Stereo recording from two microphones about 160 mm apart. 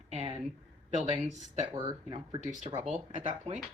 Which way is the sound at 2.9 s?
40° right (ahead or behind).